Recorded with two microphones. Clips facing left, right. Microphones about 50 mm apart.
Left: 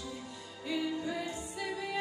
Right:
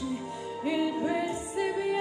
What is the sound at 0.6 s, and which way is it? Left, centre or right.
Music, right.